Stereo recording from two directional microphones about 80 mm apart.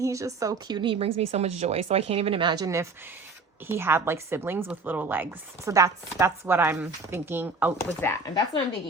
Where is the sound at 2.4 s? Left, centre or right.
Right.